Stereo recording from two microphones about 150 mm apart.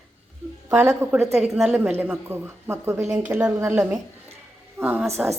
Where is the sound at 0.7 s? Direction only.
15° right (ahead or behind).